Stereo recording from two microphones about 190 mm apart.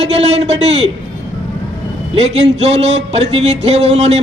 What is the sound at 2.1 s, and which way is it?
Speech, 35° right (ahead or behind).